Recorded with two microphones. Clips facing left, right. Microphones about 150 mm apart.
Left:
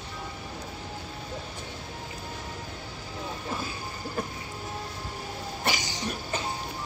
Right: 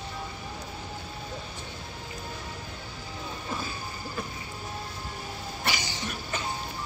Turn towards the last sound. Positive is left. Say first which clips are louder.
# left 2 dB
turn(degrees=45)  # may be behind; listen again after turning